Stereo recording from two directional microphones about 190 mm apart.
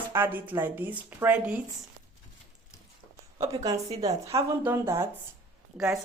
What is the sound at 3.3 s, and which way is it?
A woman's voice, 15° right (ahead or behind).